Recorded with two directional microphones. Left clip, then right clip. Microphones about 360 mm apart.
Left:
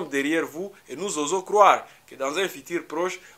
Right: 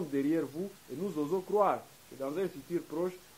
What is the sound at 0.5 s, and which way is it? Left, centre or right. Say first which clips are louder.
Speech: left 6 dB; left.